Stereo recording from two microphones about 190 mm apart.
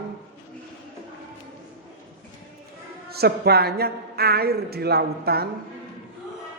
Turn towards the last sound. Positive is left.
turn(degrees=-55)  # may be behind; listen again after turning